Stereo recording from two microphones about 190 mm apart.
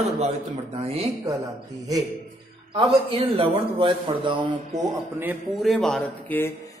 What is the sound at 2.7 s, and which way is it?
A man's voice, 30° right (ahead or behind).